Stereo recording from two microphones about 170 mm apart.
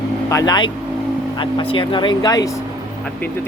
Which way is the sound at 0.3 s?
20° left (ahead or behind).